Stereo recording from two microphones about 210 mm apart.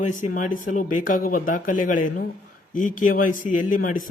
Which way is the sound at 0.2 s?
40° left (ahead or behind).